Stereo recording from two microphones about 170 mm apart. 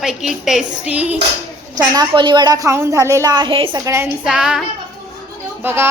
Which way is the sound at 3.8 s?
15° right (ahead or behind).